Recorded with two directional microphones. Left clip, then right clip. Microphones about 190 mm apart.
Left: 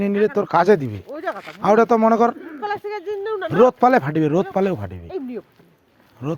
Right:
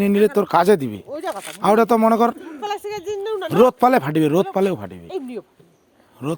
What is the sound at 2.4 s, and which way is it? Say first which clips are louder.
Speech: left 1 dB; centre (ahead or behind).